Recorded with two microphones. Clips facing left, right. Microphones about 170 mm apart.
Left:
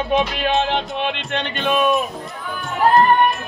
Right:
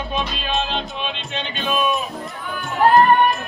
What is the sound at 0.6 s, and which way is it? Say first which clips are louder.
Music: left 5 dB; 65° left (ahead or behind).